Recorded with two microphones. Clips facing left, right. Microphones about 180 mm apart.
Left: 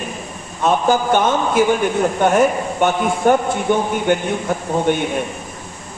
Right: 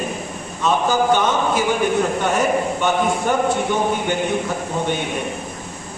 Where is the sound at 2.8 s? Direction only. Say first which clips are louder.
Left 7 dB; 50° left (ahead or behind).